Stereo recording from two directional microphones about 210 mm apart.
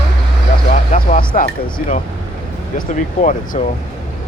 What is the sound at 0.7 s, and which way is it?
Speech, 35° left (ahead or behind).